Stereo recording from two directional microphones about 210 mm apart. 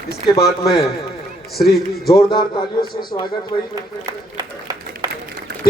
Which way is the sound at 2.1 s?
20° left (ahead or behind).